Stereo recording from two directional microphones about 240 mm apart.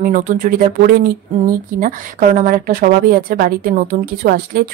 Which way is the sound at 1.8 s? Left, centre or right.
Right.